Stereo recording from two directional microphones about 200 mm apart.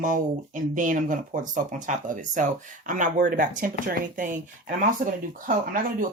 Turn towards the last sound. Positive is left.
turn(degrees=-40)  # may be behind; listen again after turning